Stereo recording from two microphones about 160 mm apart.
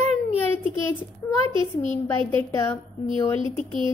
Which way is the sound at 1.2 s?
15° left (ahead or behind).